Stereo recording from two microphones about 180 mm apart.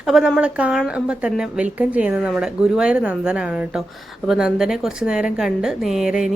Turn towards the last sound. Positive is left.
turn(degrees=0)  # may be behind; listen again after turning